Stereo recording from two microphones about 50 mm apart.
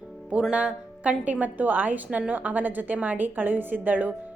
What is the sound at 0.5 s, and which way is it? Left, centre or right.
A woman's voice, right.